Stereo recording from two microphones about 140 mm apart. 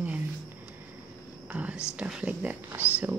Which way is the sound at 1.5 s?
10° right (ahead or behind).